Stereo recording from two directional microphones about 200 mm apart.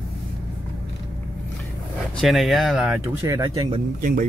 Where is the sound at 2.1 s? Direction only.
Centre (ahead or behind).